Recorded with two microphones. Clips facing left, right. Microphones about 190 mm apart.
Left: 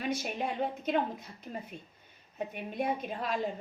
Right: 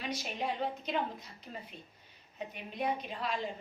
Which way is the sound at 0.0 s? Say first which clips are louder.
Left 4 dB; 50° left (ahead or behind).